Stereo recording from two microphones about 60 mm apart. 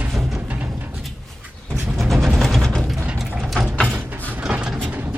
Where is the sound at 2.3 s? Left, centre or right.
Centre.